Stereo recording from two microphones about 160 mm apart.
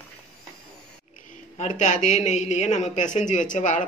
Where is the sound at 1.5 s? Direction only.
45° left (ahead or behind).